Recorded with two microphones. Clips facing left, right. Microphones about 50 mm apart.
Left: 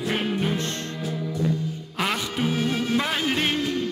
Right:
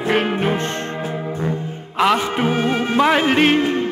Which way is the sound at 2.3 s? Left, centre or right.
Right.